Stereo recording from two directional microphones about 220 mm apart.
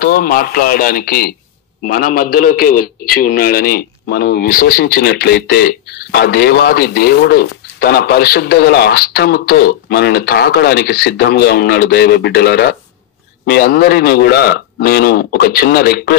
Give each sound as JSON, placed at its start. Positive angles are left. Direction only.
{"t": 0.0, "sound": "a man's voice", "side_deg": 40}